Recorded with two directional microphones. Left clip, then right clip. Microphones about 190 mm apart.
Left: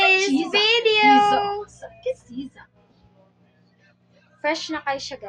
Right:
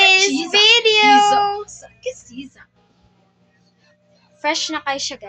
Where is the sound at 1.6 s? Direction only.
30° left (ahead or behind).